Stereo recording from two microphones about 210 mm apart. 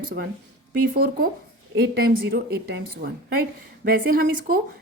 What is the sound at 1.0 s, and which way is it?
Speech, 45° right (ahead or behind).